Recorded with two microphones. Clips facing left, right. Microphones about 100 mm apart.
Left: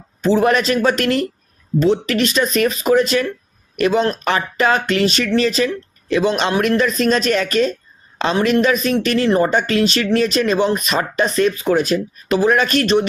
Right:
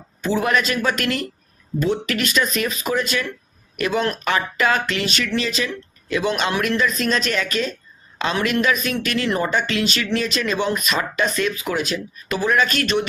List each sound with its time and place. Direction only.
0.2 s speech: 40° left (ahead or behind)